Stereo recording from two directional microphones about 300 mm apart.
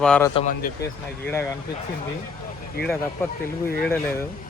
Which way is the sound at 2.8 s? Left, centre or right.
Left.